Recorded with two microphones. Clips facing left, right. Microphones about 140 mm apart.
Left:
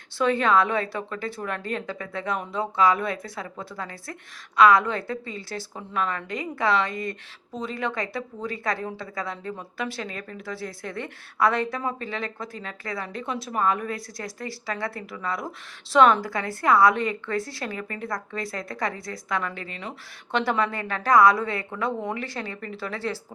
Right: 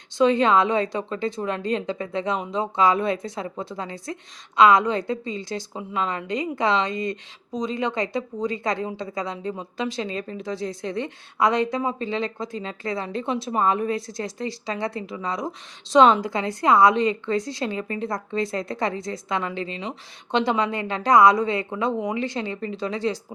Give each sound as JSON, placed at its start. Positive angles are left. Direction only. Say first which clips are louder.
{"t": 0.2, "sound": "a woman's voice", "louder": "right 3 dB", "side_deg": -20}